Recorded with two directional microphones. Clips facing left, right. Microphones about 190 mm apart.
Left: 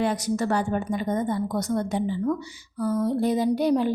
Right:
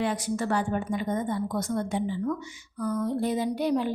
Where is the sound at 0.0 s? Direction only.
40° left (ahead or behind).